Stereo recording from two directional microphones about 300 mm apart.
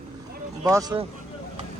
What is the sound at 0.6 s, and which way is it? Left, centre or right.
Speech, centre.